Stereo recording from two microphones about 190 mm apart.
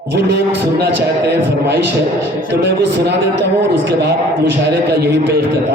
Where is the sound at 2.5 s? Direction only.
65° right (ahead or behind).